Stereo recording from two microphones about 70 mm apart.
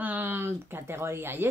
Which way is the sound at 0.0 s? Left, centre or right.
Right.